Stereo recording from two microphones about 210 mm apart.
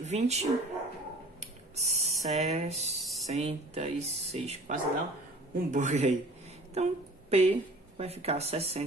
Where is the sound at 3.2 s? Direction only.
30° right (ahead or behind).